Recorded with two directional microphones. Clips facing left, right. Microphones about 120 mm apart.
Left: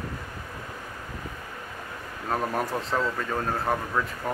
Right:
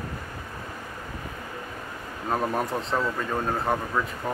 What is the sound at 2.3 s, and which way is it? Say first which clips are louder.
Speech: right 1 dB; centre (ahead or behind).